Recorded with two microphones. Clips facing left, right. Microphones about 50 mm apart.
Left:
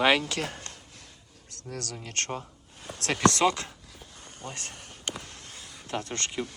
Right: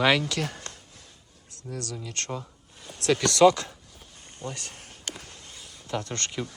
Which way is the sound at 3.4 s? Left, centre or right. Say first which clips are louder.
Right 7 dB; left.